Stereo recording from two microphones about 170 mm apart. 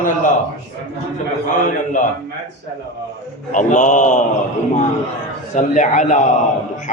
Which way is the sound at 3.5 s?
50° left (ahead or behind).